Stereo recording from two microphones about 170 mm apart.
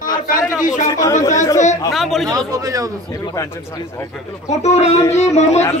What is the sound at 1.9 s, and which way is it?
Speech, centre (ahead or behind).